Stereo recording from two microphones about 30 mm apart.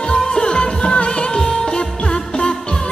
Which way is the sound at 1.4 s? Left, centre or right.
Left.